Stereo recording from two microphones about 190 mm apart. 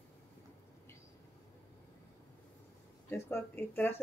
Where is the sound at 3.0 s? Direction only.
10° left (ahead or behind).